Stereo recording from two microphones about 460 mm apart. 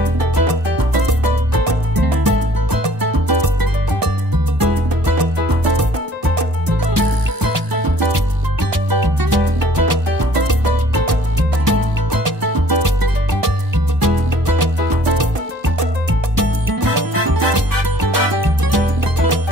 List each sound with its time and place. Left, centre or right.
0.2 s music: right
4.6 s music: right
7.0 s music: right
11.6 s music: right
16.3 s music: right